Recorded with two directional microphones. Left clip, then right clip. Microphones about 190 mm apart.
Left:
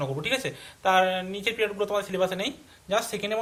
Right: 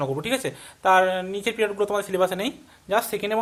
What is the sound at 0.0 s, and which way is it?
Speech, 50° right (ahead or behind).